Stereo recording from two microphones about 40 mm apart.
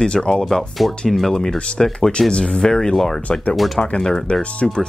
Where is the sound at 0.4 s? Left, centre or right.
Centre.